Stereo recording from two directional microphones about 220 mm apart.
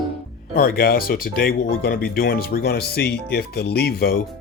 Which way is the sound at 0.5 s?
40° left (ahead or behind).